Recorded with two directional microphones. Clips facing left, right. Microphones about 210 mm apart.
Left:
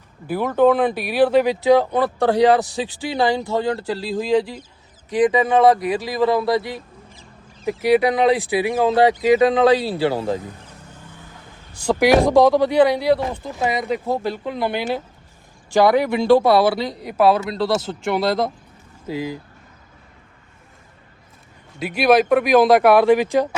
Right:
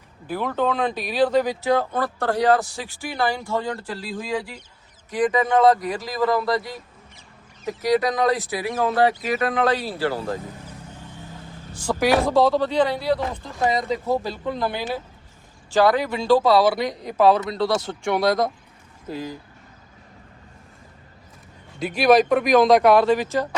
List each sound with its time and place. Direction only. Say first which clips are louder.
0.3 s speech: left 7 dB; 10° left (ahead or behind)
5.1 s speech: left 3 dB; 15° left (ahead or behind)
7.6 s speech: left 4 dB; 10° left (ahead or behind)
11.9 s speech: left 5 dB; 15° left (ahead or behind)
14.1 s speech: left 1 dB; 20° left (ahead or behind)
21.8 s speech: left 1 dB; centre (ahead or behind)